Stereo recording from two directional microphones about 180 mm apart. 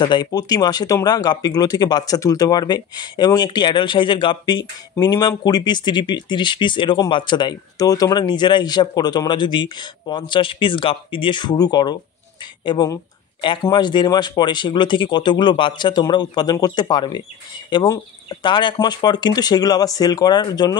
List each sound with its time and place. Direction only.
0.0 s speech: 25° left (ahead or behind)